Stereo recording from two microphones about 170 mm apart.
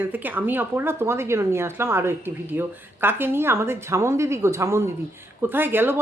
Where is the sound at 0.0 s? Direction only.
10° right (ahead or behind).